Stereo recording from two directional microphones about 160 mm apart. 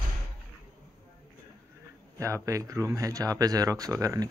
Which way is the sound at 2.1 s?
20° right (ahead or behind).